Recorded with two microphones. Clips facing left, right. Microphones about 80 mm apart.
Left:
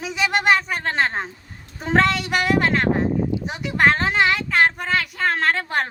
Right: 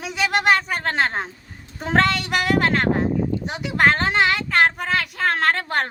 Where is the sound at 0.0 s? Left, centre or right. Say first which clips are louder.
Even; centre.